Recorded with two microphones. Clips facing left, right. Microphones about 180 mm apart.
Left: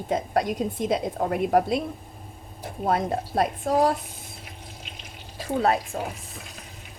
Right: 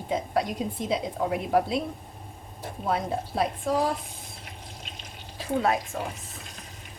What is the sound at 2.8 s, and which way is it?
A woman's voice, 50° left (ahead or behind).